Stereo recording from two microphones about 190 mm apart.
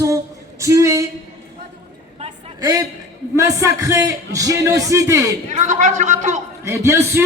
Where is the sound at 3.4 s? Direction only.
15° right (ahead or behind).